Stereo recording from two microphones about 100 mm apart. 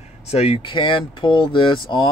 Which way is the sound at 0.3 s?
90° left.